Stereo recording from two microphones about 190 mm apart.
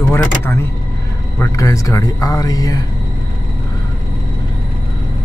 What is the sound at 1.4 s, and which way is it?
Speech, 15° left (ahead or behind).